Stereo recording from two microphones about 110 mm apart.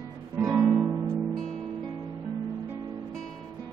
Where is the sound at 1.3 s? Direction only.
5° left (ahead or behind).